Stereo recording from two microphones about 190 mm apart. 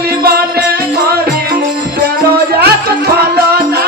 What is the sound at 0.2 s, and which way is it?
Music, 55° right (ahead or behind).